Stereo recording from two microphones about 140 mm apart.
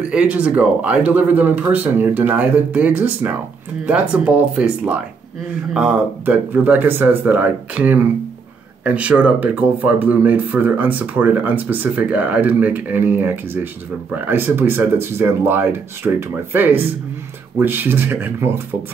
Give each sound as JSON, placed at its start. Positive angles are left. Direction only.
{"t": 0.1, "sound": "speech", "side_deg": -10}